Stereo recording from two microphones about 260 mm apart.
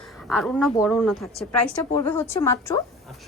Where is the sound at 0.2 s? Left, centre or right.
Centre.